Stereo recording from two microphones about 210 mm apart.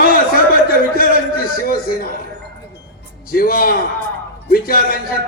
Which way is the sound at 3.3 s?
45° left (ahead or behind).